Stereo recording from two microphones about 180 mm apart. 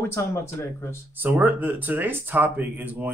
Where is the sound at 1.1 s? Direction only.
10° right (ahead or behind).